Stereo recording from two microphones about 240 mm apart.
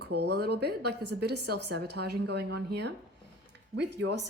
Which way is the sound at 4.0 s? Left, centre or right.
Right.